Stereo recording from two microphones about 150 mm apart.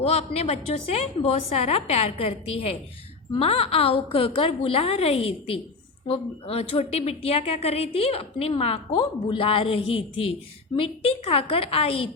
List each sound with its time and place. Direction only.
0.0 s a woman's voice: 45° left (ahead or behind)